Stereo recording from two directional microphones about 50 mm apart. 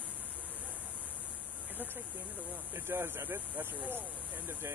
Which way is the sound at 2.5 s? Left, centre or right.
Right.